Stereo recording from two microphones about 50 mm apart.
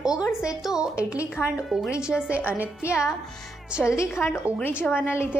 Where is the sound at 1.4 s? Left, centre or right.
Left.